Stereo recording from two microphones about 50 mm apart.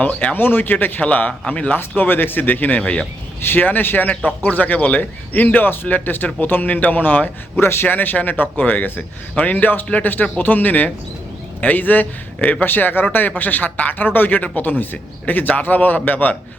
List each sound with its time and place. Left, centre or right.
0.0 s speech: left
0.3 s speech: left
1.0 s speech: left
2.0 s speech: left